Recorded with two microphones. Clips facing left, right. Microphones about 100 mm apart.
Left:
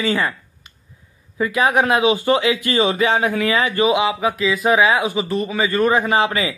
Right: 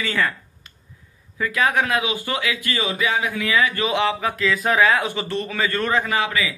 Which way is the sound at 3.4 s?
20° left (ahead or behind).